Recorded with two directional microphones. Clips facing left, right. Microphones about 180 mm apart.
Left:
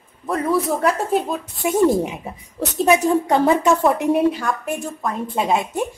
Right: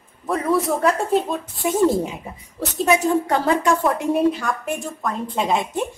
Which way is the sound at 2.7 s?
20° left (ahead or behind).